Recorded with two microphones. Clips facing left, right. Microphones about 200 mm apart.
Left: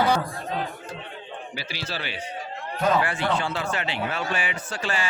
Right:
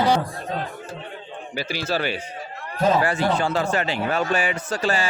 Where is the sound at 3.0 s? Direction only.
40° right (ahead or behind).